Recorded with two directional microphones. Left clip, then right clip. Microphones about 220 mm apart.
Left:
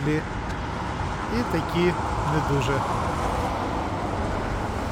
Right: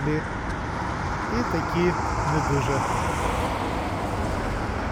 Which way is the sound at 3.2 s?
35° right (ahead or behind).